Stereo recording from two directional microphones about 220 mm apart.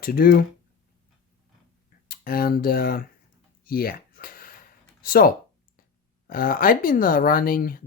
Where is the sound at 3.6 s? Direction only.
40° left (ahead or behind).